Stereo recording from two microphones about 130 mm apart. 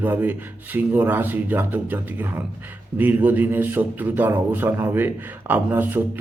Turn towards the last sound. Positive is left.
turn(degrees=-15)  # may be behind; listen again after turning